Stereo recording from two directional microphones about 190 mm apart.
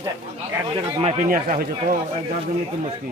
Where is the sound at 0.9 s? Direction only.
40° right (ahead or behind).